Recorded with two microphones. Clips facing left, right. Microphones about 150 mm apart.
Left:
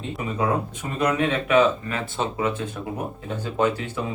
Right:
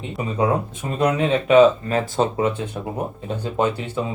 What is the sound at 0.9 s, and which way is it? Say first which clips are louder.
Speech: right 3 dB; 25° right (ahead or behind).